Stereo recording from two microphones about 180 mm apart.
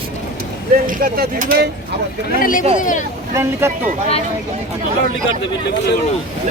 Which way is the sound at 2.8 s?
45° left (ahead or behind).